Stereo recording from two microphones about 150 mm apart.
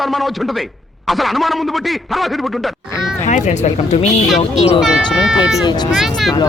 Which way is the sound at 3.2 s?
55° left (ahead or behind).